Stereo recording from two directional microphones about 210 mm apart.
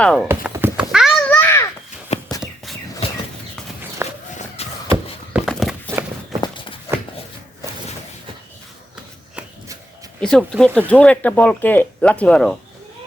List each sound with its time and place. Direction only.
0.0 s speech: 5° left (ahead or behind)
0.3 s babbling: 10° right (ahead or behind); by 1.6 s 10° left (ahead or behind)
2.1 s a sound: 30° left (ahead or behind)
4.0 s run: 10° right (ahead or behind)
4.4 s a sound: 30° left (ahead or behind)
5.3 s walk: centre (ahead or behind)
6.4 s walk: 20° left (ahead or behind)
10.2 s speech: 5° left (ahead or behind)